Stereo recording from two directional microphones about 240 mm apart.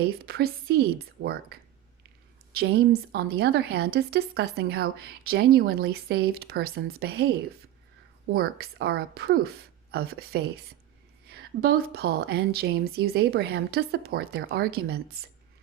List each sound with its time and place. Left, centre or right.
0.0 s a woman's voice: right
8.3 s a woman's voice: right